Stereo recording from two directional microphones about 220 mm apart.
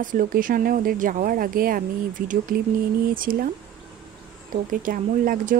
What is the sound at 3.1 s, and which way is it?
Speech, 40° right (ahead or behind).